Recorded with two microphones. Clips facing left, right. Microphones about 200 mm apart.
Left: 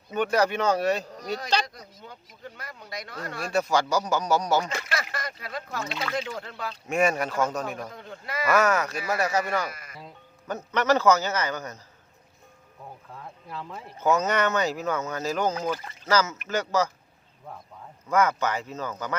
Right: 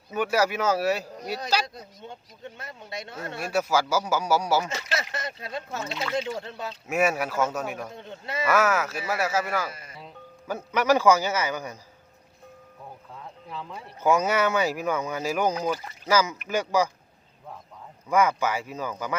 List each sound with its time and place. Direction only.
0.1 s speech: 5° right (ahead or behind)
1.6 s speech: 25° right (ahead or behind)
3.4 s speech: 5° right (ahead or behind)
4.7 s speech: 25° right (ahead or behind)
6.8 s speech: 5° right (ahead or behind)
7.9 s speech: 25° right (ahead or behind)
8.4 s speech: 5° right (ahead or behind)
9.6 s speech: 30° right (ahead or behind)
10.0 s speech: 5° right (ahead or behind)
13.1 s speech: 5° left (ahead or behind)
14.0 s speech: 10° right (ahead or behind)
18.1 s speech: 10° right (ahead or behind)